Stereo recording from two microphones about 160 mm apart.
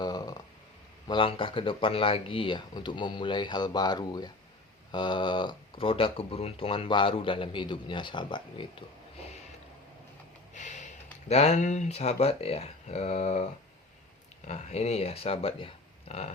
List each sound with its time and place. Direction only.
0.0 s a sound: 25° left (ahead or behind)
1.0 s speech: 30° left (ahead or behind)
10.5 s speech: 50° left (ahead or behind)